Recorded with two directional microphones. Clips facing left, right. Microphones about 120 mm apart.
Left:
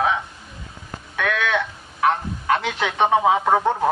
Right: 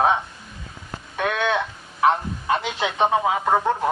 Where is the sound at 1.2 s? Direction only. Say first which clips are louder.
Even; 25° right (ahead or behind).